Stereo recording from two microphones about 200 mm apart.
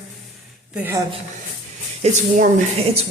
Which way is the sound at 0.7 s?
10° right (ahead or behind).